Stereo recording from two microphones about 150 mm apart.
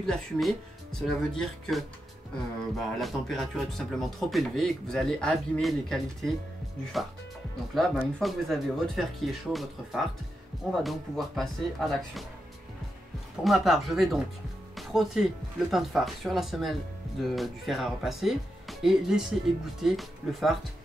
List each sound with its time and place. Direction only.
0.0 s speech: centre (ahead or behind)
3.0 s speech: centre (ahead or behind)
13.4 s speech: centre (ahead or behind)